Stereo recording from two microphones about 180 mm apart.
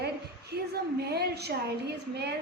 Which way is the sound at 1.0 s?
65° right (ahead or behind).